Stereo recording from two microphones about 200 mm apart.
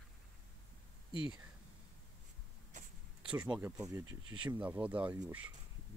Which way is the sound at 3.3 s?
5° right (ahead or behind).